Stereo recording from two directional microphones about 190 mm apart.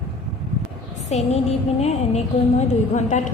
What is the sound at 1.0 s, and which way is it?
A woman's voice, 35° left (ahead or behind).